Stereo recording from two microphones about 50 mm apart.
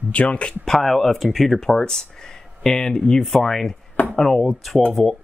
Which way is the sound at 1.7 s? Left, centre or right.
Centre.